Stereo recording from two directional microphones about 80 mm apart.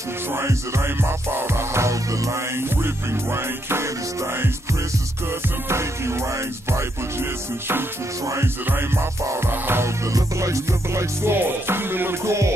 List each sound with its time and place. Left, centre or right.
0.3 s music: right
5.7 s music: right
8.6 s music: right